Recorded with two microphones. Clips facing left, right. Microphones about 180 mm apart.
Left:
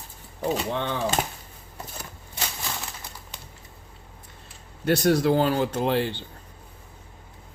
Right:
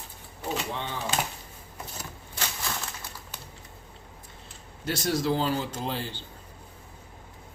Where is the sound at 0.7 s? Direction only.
60° left (ahead or behind).